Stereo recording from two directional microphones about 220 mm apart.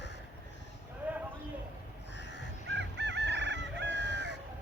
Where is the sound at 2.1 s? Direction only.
50° left (ahead or behind).